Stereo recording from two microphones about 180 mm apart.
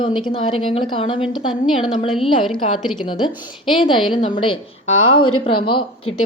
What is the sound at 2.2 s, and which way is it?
A woman's voice, 30° left (ahead or behind).